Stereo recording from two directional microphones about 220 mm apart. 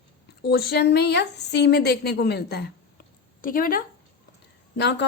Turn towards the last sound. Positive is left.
turn(degrees=50)  # may be behind; listen again after turning